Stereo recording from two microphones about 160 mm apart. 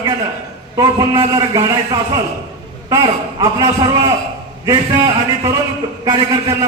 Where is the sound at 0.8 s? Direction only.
30° right (ahead or behind).